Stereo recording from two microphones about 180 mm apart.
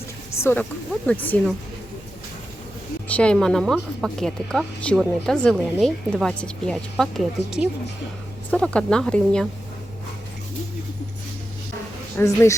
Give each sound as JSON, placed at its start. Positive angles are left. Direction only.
{"t": 0.6, "sound": "speech", "side_deg": 10}
{"t": 3.1, "sound": "speech", "side_deg": 5}
{"t": 12.1, "sound": "speech", "side_deg": 15}